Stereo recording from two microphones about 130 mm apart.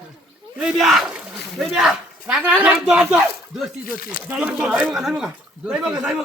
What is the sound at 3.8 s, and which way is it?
Speech, 90° left.